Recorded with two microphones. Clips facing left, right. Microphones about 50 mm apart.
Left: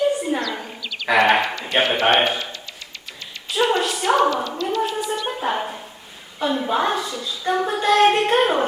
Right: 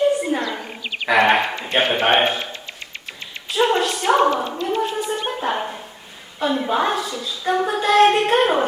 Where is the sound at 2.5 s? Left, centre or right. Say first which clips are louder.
Right 2 dB; right.